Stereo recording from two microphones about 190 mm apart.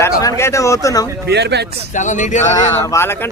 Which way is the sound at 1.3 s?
60° right (ahead or behind).